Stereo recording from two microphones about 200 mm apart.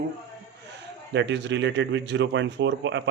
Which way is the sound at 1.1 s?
60° right (ahead or behind).